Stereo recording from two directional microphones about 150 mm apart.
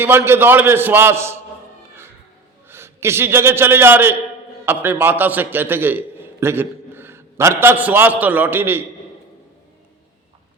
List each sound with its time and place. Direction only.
0.0 s a man's voice: 15° right (ahead or behind)
2.6 s a man's voice: 15° right (ahead or behind)